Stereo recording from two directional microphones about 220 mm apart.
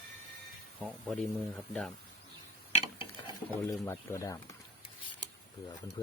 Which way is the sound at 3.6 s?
15° left (ahead or behind).